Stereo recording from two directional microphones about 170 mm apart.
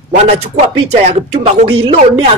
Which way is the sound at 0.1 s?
40° right (ahead or behind).